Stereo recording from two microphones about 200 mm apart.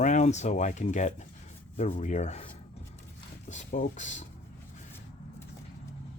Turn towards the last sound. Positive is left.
turn(degrees=35)  # may be behind; listen again after turning